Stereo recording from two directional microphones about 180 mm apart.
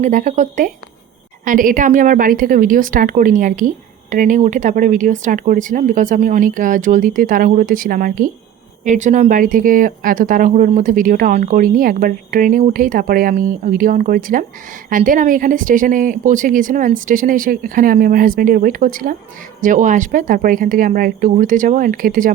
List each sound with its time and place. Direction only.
0.0 s speech: 45° right (ahead or behind)